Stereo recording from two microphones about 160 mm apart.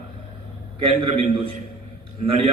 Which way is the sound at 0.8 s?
35° right (ahead or behind).